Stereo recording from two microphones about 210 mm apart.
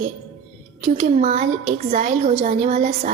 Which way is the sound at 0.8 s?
35° right (ahead or behind).